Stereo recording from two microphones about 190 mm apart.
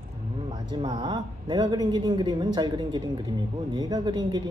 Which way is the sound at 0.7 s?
20° right (ahead or behind).